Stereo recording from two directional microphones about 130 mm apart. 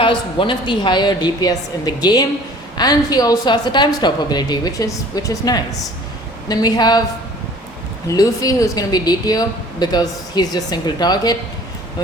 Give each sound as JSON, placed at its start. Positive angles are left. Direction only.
{"t": 0.0, "sound": "a woman's voice", "side_deg": 40}
{"t": 8.0, "sound": "a woman's voice", "side_deg": 25}